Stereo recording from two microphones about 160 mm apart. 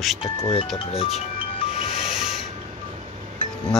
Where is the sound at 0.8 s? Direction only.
40° left (ahead or behind).